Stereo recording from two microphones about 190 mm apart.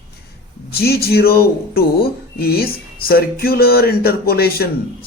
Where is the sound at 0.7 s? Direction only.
55° left (ahead or behind).